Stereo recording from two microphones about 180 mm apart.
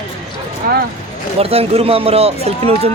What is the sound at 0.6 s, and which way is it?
Speech, 55° right (ahead or behind).